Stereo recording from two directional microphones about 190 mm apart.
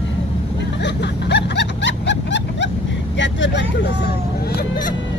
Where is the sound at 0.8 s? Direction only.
65° left (ahead or behind).